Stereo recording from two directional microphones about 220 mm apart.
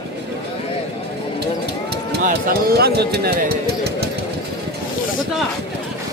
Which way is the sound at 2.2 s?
45° right (ahead or behind).